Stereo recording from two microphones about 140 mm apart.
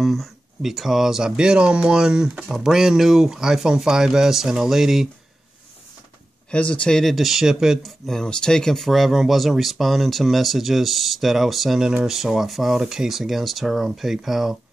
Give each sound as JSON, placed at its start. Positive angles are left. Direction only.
{"t": 0.0, "sound": "speech", "side_deg": 0}
{"t": 6.5, "sound": "speech", "side_deg": 10}